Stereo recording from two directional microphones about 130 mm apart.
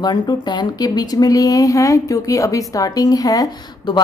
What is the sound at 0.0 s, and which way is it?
Speech, 35° left (ahead or behind).